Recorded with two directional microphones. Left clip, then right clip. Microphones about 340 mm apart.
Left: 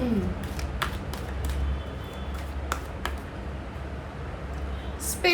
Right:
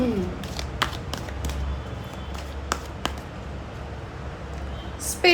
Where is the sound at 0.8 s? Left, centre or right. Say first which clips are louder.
Right 5 dB; right.